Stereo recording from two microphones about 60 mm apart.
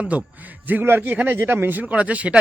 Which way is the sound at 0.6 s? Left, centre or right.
Right.